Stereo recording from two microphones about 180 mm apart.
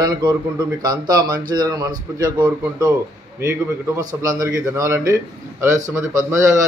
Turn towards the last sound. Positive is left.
turn(degrees=-15)  # may be behind; listen again after turning